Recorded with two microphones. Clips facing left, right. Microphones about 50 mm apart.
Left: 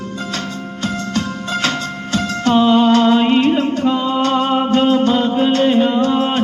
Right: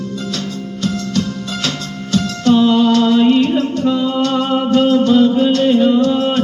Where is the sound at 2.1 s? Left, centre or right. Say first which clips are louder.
Right 2 dB; left.